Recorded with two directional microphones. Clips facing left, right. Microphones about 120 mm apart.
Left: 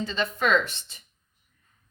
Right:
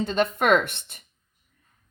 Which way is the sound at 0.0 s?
55° right (ahead or behind).